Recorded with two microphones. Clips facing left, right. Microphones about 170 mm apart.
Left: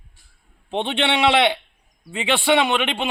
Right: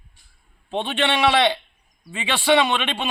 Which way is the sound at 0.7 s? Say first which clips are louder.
Left 1 dB; 20° left (ahead or behind).